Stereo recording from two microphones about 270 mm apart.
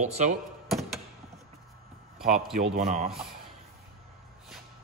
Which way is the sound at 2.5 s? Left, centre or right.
Right.